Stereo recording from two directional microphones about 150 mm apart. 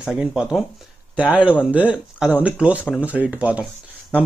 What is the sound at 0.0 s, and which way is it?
Speech, 5° right (ahead or behind).